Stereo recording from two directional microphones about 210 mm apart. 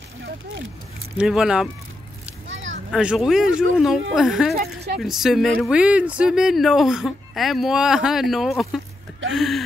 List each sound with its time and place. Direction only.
1.1 s speech: 5° right (ahead or behind)
2.4 s a sound: 65° right (ahead or behind)
2.9 s speech: 5° right (ahead or behind)